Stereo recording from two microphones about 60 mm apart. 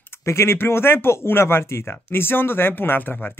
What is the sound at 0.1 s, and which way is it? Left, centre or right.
Speech, left.